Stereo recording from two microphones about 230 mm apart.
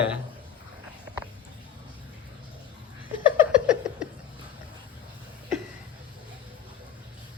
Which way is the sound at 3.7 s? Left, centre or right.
Centre.